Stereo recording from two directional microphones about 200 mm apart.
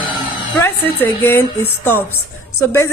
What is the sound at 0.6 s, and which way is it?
A woman's voice, 10° left (ahead or behind).